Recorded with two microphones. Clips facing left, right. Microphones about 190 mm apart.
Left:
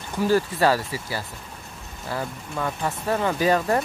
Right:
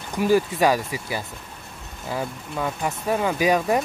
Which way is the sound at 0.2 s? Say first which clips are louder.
Right 1 dB; 15° right (ahead or behind).